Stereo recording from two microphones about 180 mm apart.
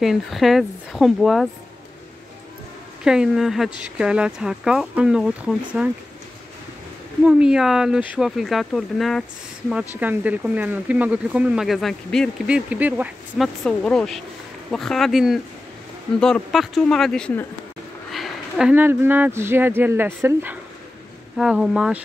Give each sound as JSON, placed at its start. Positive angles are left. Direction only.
{"t": 0.0, "sound": "speech", "side_deg": 0}
{"t": 3.0, "sound": "speech", "side_deg": -5}
{"t": 7.2, "sound": "speech", "side_deg": -5}
{"t": 13.7, "sound": "speech", "side_deg": 5}